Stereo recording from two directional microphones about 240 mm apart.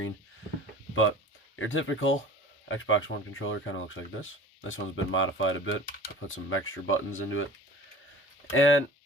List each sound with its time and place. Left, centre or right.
1.5 s speech: left
8.5 s speech: left